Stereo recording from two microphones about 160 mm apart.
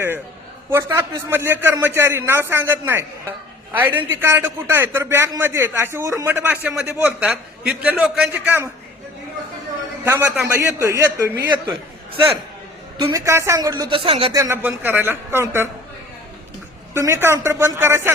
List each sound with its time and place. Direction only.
0.7 s a man's voice: 20° right (ahead or behind)
10.0 s a man's voice: 15° right (ahead or behind)
12.1 s a man's voice: 30° right (ahead or behind)
13.0 s a woman's voice: 20° right (ahead or behind); by 14.3 s 35° right (ahead or behind)
14.3 s a man's voice: 15° right (ahead or behind)
16.9 s a man's voice: 15° right (ahead or behind)